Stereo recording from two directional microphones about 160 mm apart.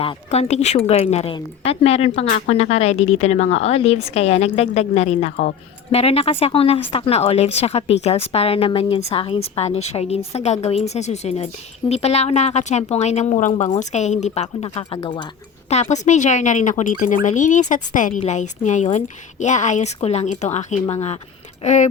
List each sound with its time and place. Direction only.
0.0 s a woman's voice: 40° left (ahead or behind)
15.7 s speech: 45° left (ahead or behind)